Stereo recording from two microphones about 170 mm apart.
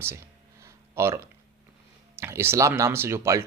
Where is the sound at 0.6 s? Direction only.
15° right (ahead or behind).